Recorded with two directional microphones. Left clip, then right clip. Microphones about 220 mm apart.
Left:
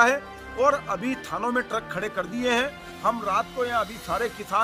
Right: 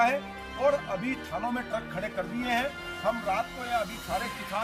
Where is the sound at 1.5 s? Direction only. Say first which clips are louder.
Left 6 dB; 20° left (ahead or behind).